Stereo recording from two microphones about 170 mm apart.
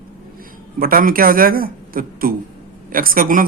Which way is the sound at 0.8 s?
55° right (ahead or behind).